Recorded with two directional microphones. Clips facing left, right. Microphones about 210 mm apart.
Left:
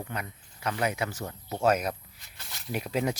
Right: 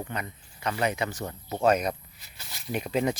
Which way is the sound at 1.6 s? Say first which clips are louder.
Right 2 dB; 5° left (ahead or behind).